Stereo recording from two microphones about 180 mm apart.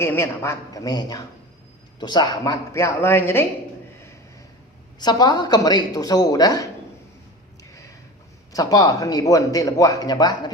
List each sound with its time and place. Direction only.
0.0 s speech: 15° left (ahead or behind)
4.9 s speech: 25° left (ahead or behind)
8.5 s speech: 20° left (ahead or behind)